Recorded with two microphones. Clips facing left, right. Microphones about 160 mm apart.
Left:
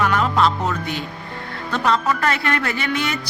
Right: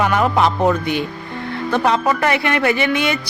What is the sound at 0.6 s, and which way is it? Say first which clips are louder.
Speech: right 7 dB; 60° right (ahead or behind).